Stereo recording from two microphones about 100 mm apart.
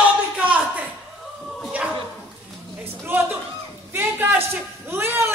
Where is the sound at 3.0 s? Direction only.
25° right (ahead or behind).